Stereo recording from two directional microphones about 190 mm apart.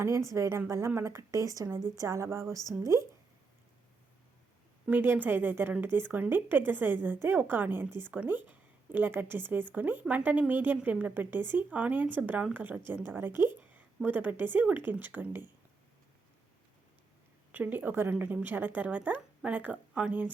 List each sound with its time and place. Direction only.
0.0 s a woman's voice: 15° right (ahead or behind)
4.9 s a woman's voice: 10° right (ahead or behind)
17.5 s a woman's voice: 10° right (ahead or behind)